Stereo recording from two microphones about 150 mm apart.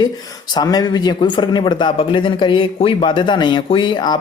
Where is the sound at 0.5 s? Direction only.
25° left (ahead or behind).